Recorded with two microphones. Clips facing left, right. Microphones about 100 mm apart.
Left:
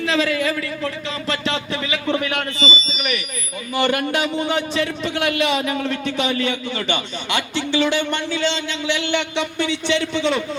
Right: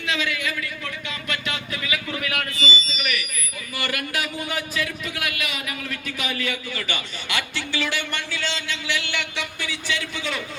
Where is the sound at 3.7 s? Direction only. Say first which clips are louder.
Left 9 dB; 25° left (ahead or behind).